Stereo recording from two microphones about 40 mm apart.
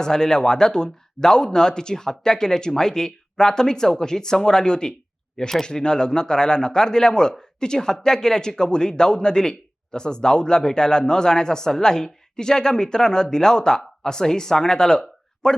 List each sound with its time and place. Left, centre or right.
0.0 s a man's voice: centre